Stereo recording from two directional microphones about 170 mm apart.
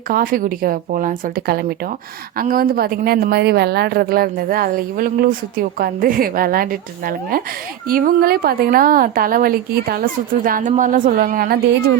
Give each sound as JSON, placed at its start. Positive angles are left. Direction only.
{"t": 0.1, "sound": "a woman's voice", "side_deg": -55}
{"t": 7.9, "sound": "a woman's voice", "side_deg": -55}